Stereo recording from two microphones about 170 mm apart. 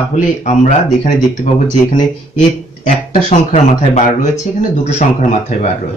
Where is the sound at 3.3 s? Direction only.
45° left (ahead or behind).